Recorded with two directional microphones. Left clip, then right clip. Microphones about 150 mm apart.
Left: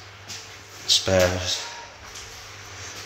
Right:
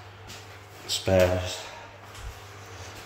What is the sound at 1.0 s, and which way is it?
Speech, 10° right (ahead or behind).